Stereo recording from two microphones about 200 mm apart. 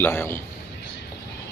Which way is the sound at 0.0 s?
10° left (ahead or behind).